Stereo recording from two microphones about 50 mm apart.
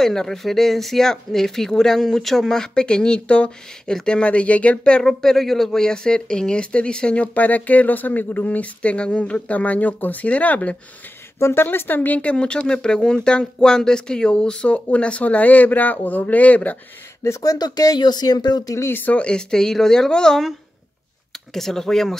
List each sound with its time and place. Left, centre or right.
0.0 s speech: centre
5.0 s speech: centre
7.3 s speech: left
11.3 s speech: left
19.1 s speech: centre
21.5 s speech: centre